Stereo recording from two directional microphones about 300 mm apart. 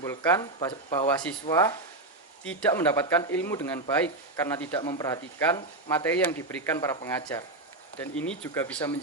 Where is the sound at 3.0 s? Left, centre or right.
Centre.